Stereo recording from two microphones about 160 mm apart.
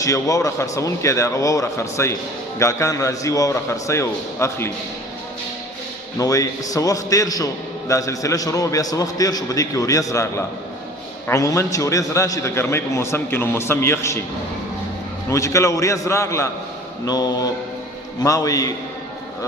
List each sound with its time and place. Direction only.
0.0 s a man's voice: 20° left (ahead or behind)
6.1 s a man's voice: 20° left (ahead or behind)
15.3 s a man's voice: 20° left (ahead or behind)